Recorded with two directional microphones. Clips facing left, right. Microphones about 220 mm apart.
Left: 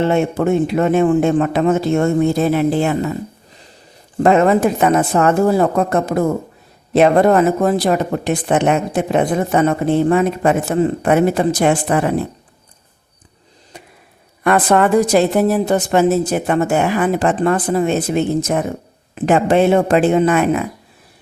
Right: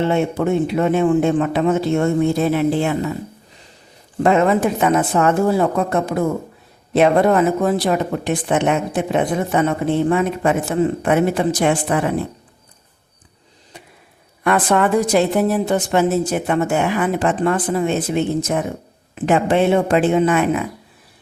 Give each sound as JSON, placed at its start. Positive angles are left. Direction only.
{"t": 0.1, "sound": "speech", "side_deg": 45}
{"t": 4.2, "sound": "speech", "side_deg": 45}
{"t": 14.4, "sound": "speech", "side_deg": 45}